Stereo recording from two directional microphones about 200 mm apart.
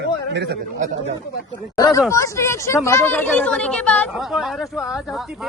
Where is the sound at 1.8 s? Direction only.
15° left (ahead or behind); by 5.3 s centre (ahead or behind).